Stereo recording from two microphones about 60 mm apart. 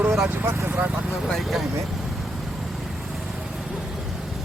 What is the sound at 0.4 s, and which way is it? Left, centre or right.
Speech, right.